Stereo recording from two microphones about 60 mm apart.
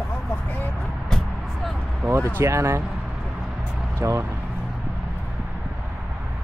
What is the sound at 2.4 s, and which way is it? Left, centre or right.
Speech, right.